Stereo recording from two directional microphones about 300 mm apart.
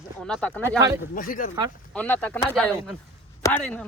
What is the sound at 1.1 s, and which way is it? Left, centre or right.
Speech, left.